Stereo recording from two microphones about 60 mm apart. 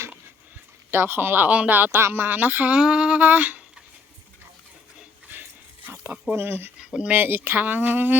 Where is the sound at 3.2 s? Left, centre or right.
Right.